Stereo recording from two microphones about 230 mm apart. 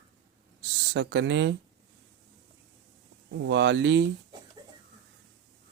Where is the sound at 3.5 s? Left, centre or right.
Right.